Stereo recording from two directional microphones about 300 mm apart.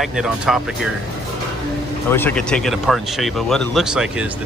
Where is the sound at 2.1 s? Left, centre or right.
Centre.